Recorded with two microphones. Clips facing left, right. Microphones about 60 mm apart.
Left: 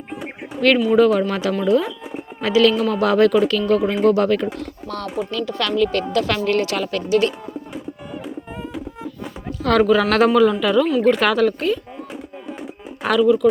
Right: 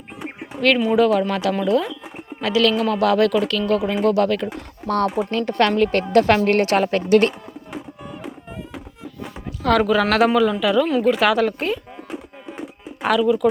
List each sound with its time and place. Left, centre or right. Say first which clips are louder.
0.9 s speech: left 2 dB; centre
4.4 s speech: left 3 dB; right
4.9 s a woman's voice: right 7 dB; right
9.5 s a sound: left 1 dB; centre
9.8 s speech: left 4 dB; centre
13.0 s a sound: left 1 dB; centre
13.2 s speech: left 4 dB; centre